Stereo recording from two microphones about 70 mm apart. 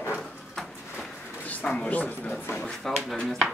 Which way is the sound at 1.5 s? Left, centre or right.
Centre.